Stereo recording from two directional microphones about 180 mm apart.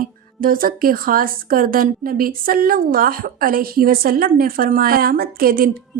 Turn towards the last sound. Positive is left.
turn(degrees=-55)  # may be behind; listen again after turning